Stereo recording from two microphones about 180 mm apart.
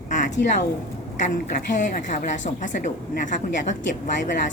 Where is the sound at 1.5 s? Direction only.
45° left (ahead or behind).